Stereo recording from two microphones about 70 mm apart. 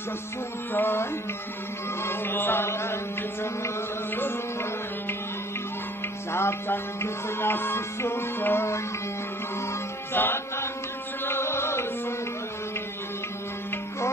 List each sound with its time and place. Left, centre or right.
0.7 s music: left
2.0 s music: left
6.3 s music: left
10.1 s music: left